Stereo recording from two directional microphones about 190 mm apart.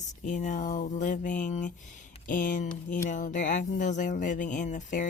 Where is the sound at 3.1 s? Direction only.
40° left (ahead or behind).